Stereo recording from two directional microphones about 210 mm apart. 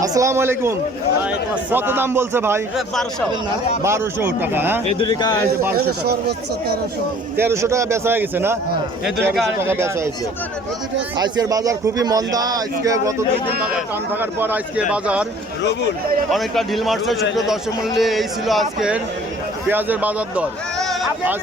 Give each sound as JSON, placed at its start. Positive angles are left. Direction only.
{"t": 0.0, "sound": "a man's voice", "side_deg": -15}
{"t": 2.9, "sound": "a man's voice", "side_deg": 0}
{"t": 3.8, "sound": "a man's voice", "side_deg": -10}
{"t": 4.9, "sound": "a man's voice", "side_deg": 20}
{"t": 5.7, "sound": "speech", "side_deg": -50}
{"t": 7.3, "sound": "a man's voice", "side_deg": -10}
{"t": 11.2, "sound": "a man's voice", "side_deg": -20}
{"t": 16.3, "sound": "a man's voice", "side_deg": 0}